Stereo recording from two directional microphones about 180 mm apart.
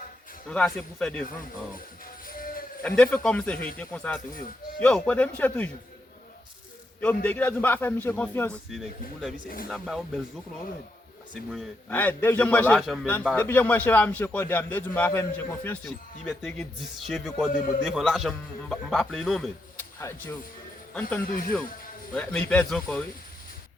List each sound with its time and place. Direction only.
0.5 s a man's voice: 5° left (ahead or behind)
2.2 s music: 50° left (ahead or behind)
2.8 s a man's voice: 5° left (ahead or behind)
7.0 s a man's voice: 10° left (ahead or behind)
11.5 s a man's voice: 10° left (ahead or behind)
15.8 s a man's voice: centre (ahead or behind)
20.0 s a man's voice: 15° left (ahead or behind)
21.2 s speech: 55° left (ahead or behind)
22.1 s a man's voice: 5° left (ahead or behind)